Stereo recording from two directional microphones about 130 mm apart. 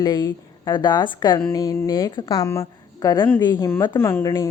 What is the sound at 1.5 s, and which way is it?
A woman's voice, 25° left (ahead or behind).